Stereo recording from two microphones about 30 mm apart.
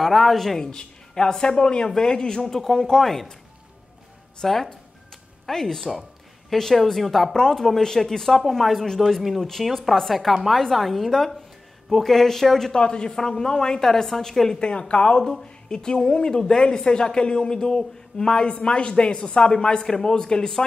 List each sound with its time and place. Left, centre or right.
0.0 s speech: centre
0.6 s speech: left
2.4 s speech: centre
4.4 s speech: centre
8.3 s speech: centre
12.7 s speech: left
13.2 s speech: centre
14.6 s speech: left